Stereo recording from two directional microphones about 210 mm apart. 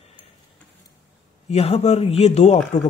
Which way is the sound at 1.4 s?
30° left (ahead or behind).